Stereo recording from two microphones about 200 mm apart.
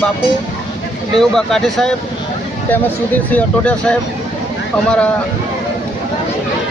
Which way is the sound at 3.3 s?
5° left (ahead or behind).